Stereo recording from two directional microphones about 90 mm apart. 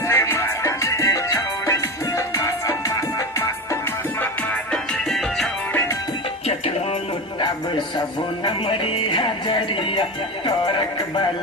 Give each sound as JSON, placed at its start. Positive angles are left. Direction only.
{"t": 0.1, "sound": "music", "side_deg": 30}
{"t": 4.2, "sound": "music", "side_deg": 10}
{"t": 5.7, "sound": "music", "side_deg": 30}
{"t": 8.4, "sound": "music", "side_deg": 75}